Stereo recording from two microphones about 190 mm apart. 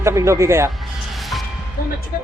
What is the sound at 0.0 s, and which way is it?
Speech, 15° right (ahead or behind).